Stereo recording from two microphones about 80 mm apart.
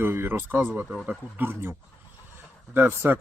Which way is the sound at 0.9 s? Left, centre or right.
Centre.